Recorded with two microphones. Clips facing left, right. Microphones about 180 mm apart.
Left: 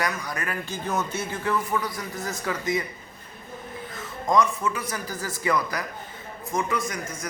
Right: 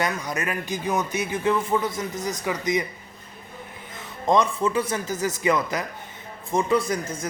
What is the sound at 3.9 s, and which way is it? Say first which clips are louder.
A man's voice: right 2 dB; 25° right (ahead or behind).